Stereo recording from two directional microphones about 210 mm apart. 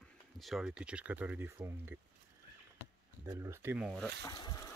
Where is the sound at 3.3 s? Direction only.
10° right (ahead or behind).